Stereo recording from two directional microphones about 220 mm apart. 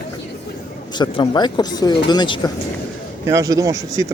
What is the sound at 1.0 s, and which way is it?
Speech, 20° left (ahead or behind).